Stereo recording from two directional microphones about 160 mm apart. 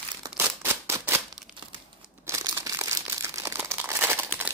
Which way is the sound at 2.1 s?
15° right (ahead or behind).